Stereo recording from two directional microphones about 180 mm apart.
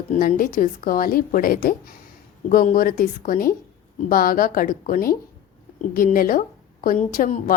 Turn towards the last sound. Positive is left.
turn(degrees=50)  # may be behind; listen again after turning